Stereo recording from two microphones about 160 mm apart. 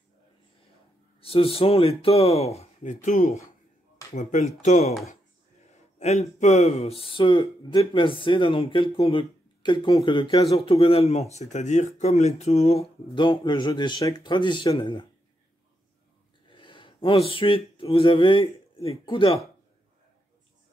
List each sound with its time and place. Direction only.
1.2 s speech: 35° left (ahead or behind)
5.9 s speech: 45° left (ahead or behind); by 10.5 s 25° left (ahead or behind)
10.5 s speech: 35° left (ahead or behind)
16.4 s speech: 30° left (ahead or behind)